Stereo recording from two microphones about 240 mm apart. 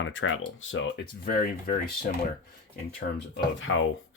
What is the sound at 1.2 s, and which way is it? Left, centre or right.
Speech, left.